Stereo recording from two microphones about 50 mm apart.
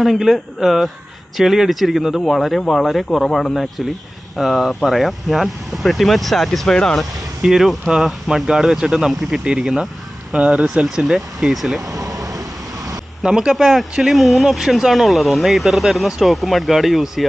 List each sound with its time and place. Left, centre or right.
0.0 s speech: centre
3.1 s speech: centre
7.0 s speech: centre
13.2 s speech: centre
13.6 s speech: centre